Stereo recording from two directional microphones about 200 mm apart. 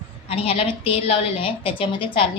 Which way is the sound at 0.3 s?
30° left (ahead or behind).